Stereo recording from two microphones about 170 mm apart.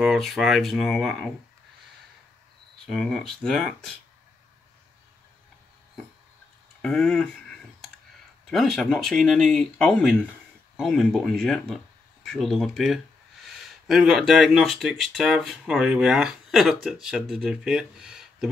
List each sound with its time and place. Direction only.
0.0 s speech: centre (ahead or behind)
2.9 s speech: centre (ahead or behind)
6.8 s a sound: centre (ahead or behind)
8.5 s speech: centre (ahead or behind)